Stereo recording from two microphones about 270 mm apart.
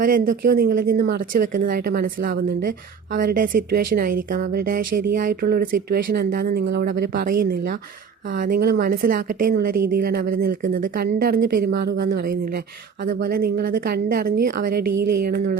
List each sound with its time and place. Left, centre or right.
0.0 s speech: right
8.4 s speech: right